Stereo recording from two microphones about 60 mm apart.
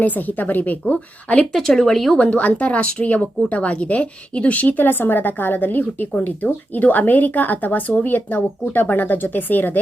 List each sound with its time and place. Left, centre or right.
0.0 s speech: left
1.5 s speech: centre
2.1 s speech: left